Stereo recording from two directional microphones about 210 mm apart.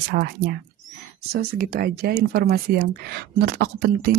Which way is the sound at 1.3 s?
45° right (ahead or behind).